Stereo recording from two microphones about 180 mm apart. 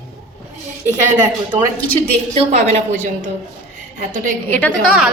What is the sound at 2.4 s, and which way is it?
Speech, 35° right (ahead or behind).